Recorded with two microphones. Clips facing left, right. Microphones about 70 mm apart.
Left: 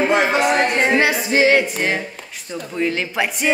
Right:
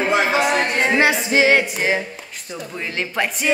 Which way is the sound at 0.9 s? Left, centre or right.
Right.